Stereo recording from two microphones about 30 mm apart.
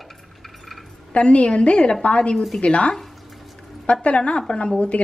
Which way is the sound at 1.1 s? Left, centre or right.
Left.